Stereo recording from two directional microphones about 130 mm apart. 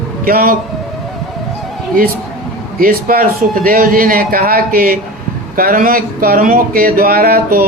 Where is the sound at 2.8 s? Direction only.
90° right.